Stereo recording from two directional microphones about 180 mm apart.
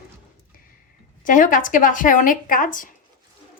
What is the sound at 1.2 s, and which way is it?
A woman's voice, 45° left (ahead or behind).